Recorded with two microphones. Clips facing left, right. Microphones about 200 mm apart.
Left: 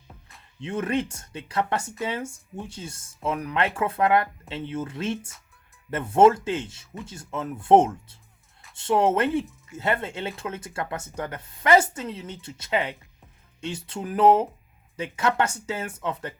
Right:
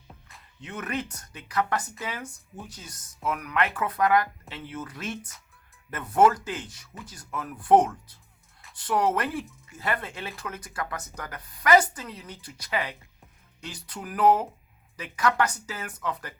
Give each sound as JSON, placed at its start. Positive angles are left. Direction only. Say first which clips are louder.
{"t": 0.6, "sound": "speech", "louder": "left 7 dB", "side_deg": 30}